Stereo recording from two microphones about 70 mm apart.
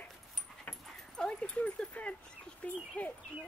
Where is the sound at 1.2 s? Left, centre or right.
Centre.